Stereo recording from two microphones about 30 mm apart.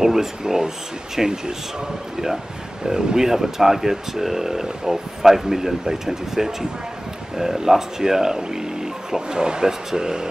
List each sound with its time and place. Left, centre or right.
0.0 s speech: centre
2.8 s speech: right
3.3 s speech: centre